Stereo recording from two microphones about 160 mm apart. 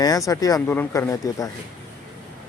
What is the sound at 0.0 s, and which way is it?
A man's voice, 20° left (ahead or behind).